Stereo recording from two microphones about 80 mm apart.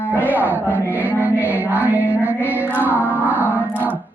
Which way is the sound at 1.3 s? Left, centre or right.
Right.